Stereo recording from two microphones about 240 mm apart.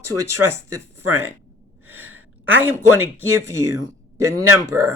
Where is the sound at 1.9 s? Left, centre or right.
Right.